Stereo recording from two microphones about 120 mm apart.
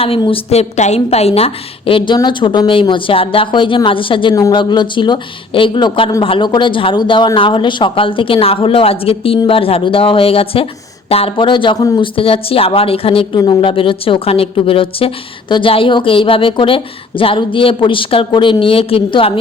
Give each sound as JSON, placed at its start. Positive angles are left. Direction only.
{"t": 0.5, "sound": "a woman's voice", "side_deg": 65}